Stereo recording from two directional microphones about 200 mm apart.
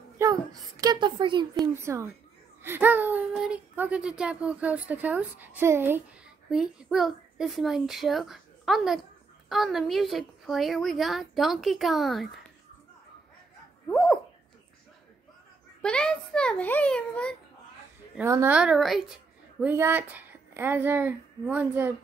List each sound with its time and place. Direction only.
0.2 s a woman's voice: 20° right (ahead or behind); by 12.3 s centre (ahead or behind)
13.8 s dog: 5° left (ahead or behind)
15.8 s a woman's voice: 5° left (ahead or behind)
18.1 s a woman's voice: 15° right (ahead or behind)
19.6 s a child's voice: 10° right (ahead or behind)